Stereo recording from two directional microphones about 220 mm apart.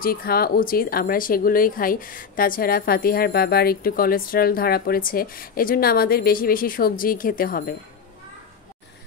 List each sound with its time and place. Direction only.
0.0 s speech: 40° left (ahead or behind)